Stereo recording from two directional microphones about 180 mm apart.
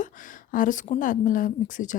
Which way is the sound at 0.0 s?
45° left (ahead or behind).